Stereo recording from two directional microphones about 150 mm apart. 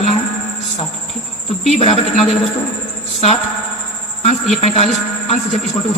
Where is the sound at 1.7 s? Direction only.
45° left (ahead or behind).